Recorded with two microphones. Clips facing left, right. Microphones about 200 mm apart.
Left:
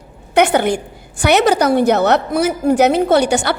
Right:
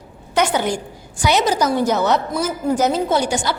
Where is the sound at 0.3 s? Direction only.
60° left (ahead or behind).